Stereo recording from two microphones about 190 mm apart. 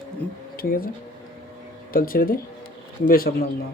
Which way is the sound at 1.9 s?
50° left (ahead or behind).